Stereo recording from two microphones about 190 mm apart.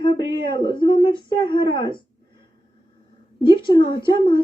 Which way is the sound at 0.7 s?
25° left (ahead or behind).